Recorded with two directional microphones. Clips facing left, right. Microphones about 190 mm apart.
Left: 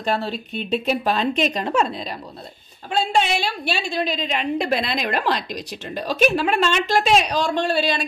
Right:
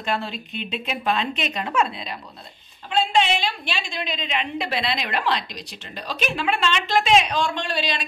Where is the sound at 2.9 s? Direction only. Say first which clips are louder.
Even; 45° left (ahead or behind).